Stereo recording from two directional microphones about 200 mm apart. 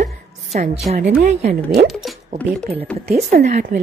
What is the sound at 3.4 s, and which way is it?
Speech, 35° right (ahead or behind).